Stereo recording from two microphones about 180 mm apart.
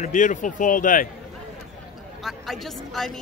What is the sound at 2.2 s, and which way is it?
Speech, centre (ahead or behind).